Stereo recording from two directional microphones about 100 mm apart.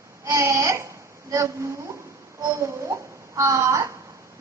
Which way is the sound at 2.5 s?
30° right (ahead or behind).